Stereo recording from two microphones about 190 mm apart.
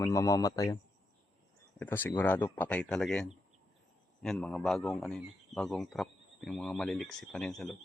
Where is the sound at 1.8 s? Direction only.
10° left (ahead or behind).